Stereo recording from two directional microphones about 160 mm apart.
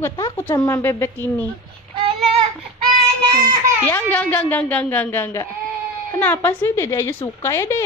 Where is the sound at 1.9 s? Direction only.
35° right (ahead or behind).